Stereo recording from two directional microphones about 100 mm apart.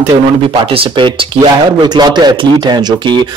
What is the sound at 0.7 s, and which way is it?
Speech, 55° right (ahead or behind).